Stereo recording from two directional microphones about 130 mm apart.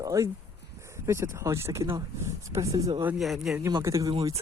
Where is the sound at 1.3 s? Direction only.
20° right (ahead or behind).